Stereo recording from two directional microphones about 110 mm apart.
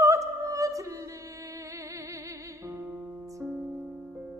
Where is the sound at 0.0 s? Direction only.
30° right (ahead or behind).